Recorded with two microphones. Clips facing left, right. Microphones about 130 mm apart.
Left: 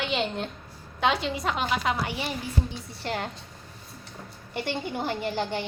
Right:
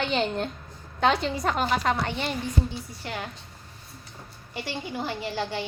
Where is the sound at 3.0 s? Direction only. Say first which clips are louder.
Left 5 dB; 55° left (ahead or behind).